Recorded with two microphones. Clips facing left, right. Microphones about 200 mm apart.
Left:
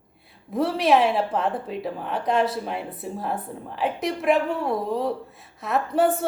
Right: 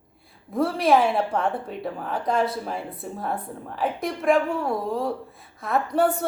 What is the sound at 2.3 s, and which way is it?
Speech, 25° left (ahead or behind).